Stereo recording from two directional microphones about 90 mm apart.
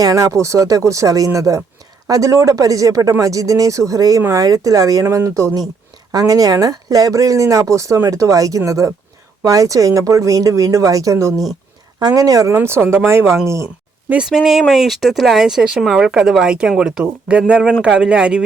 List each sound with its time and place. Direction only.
0.0 s speech: 40° right (ahead or behind)
12.5 s speech: 30° right (ahead or behind)
14.1 s speech: 5° right (ahead or behind)